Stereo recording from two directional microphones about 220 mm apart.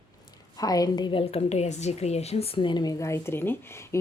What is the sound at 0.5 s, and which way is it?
A woman's voice, 15° left (ahead or behind).